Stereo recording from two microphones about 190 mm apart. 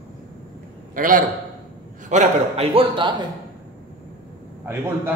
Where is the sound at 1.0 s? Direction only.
45° right (ahead or behind).